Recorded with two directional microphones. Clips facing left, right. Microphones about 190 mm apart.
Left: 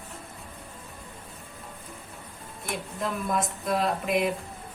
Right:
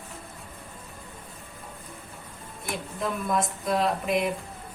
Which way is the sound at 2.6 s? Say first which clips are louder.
Right 1 dB; centre (ahead or behind).